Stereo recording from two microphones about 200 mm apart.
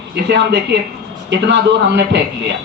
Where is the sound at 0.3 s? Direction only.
60° right (ahead or behind).